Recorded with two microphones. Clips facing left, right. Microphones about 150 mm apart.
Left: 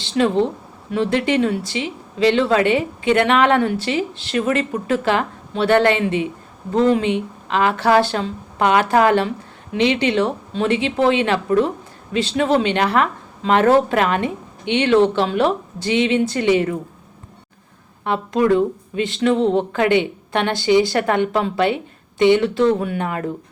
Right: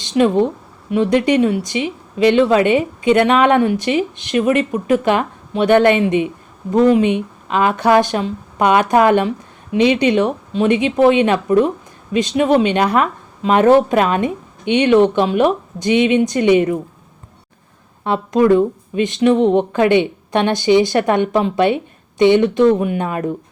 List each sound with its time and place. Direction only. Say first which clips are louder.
0.0 s speech: right 3 dB; 20° right (ahead or behind)
18.0 s speech: right 4 dB; 20° right (ahead or behind)